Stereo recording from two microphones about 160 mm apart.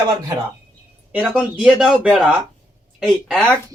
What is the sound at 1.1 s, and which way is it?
Speech, 5° right (ahead or behind).